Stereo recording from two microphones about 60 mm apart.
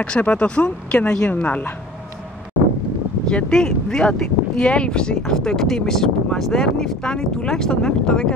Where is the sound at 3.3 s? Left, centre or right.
Centre.